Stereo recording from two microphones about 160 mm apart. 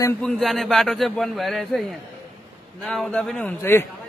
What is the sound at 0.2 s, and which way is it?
A man's voice, 5° left (ahead or behind).